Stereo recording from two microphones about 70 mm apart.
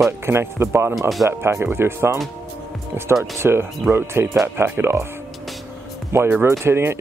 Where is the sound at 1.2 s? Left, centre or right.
Right.